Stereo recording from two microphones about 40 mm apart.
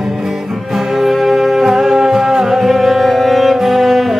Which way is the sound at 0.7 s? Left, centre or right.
Centre.